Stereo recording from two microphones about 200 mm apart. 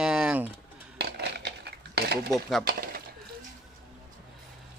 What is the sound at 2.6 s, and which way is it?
Speech, 50° right (ahead or behind).